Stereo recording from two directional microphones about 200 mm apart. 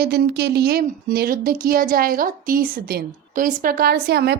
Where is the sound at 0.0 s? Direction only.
55° right (ahead or behind).